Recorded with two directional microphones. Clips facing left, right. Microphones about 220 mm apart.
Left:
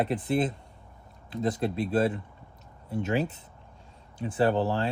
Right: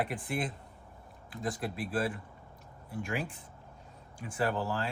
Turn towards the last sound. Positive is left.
turn(degrees=25)  # may be behind; listen again after turning